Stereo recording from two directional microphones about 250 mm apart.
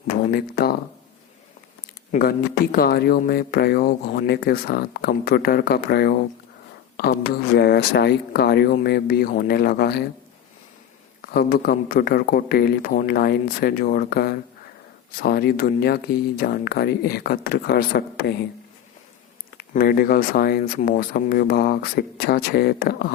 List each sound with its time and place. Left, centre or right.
0.3 s speech: left
2.7 s speech: left
11.2 s speech: left
19.5 s speech: left